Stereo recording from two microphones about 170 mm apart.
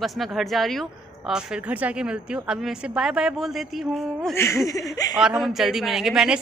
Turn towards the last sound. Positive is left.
turn(degrees=-5)  # may be behind; listen again after turning